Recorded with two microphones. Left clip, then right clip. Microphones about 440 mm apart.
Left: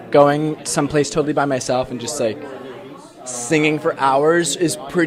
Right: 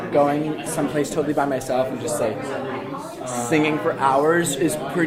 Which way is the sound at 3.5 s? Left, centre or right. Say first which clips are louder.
Left 4 dB; left.